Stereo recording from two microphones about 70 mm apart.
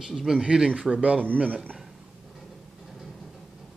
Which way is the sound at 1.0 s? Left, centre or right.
Right.